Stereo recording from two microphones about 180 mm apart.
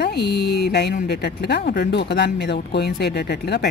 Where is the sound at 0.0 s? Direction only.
65° left (ahead or behind).